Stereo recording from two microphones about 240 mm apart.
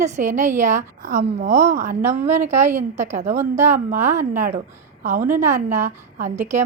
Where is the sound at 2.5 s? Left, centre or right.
Centre.